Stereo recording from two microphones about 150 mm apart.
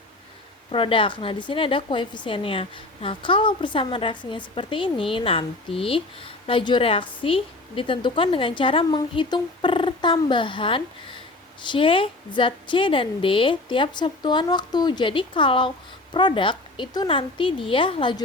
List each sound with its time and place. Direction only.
0.7 s a woman's voice: 35° left (ahead or behind)